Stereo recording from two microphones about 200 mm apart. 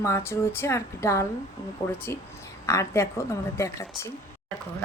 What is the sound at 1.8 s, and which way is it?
Speech, 30° left (ahead or behind).